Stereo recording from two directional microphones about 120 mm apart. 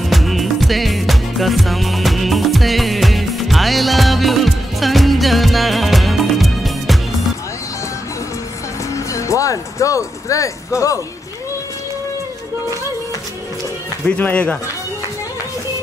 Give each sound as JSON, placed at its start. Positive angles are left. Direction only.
{"t": 0.0, "sound": "music", "side_deg": 0}
{"t": 8.9, "sound": "music", "side_deg": 25}
{"t": 14.0, "sound": "speech", "side_deg": 10}